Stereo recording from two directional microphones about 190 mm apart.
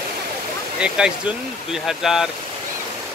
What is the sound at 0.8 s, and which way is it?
Speech, 5° right (ahead or behind).